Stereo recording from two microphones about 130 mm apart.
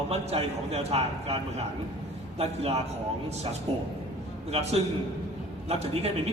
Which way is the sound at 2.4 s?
50° right (ahead or behind).